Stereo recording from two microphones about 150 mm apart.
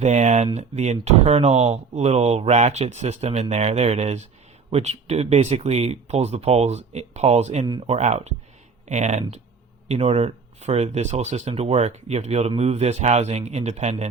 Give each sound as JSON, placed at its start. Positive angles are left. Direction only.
{"t": 0.0, "sound": "speech", "side_deg": -50}